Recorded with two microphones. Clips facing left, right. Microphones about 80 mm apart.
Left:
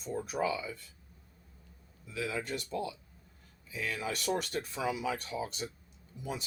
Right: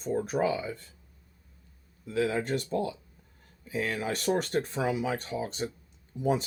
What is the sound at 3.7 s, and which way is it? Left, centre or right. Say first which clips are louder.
Speech: right 5 dB; right.